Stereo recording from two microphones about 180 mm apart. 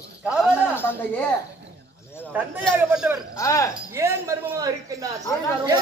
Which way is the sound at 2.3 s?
10° right (ahead or behind).